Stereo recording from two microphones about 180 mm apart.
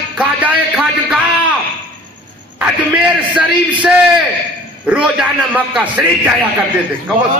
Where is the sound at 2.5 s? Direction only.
5° right (ahead or behind).